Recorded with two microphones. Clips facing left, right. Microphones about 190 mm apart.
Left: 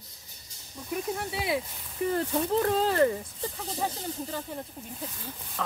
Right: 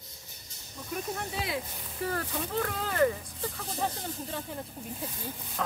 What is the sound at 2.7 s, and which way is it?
Speech, 30° left (ahead or behind).